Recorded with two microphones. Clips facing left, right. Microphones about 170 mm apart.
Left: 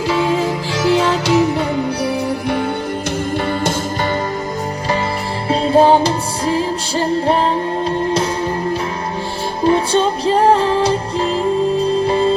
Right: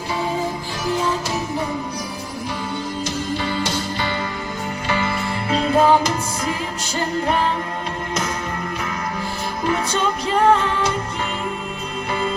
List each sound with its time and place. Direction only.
0.1 s music: 90° left
5.5 s music: 30° left (ahead or behind)
9.6 s music: 30° left (ahead or behind)